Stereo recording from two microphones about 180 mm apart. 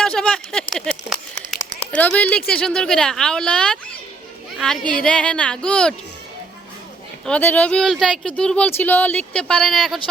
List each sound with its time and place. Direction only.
0.0 s a sound: 5° left (ahead or behind)
1.5 s speech: 10° left (ahead or behind)
7.3 s speech: 10° left (ahead or behind)